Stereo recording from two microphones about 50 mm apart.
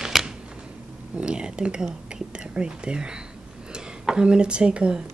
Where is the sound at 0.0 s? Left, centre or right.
Centre.